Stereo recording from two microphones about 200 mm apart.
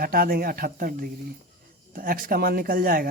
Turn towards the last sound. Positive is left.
turn(degrees=-45)  # may be behind; listen again after turning